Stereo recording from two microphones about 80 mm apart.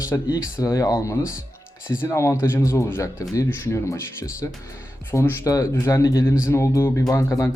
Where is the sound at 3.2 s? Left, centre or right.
Left.